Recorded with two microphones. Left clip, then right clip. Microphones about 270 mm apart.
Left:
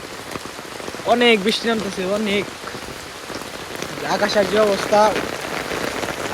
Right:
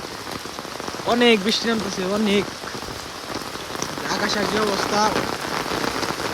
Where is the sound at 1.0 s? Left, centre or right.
Centre.